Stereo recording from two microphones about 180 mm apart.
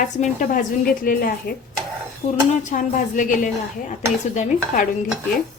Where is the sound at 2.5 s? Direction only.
45° left (ahead or behind).